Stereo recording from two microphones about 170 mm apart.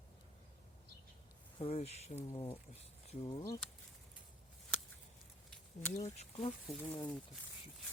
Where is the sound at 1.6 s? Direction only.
35° left (ahead or behind).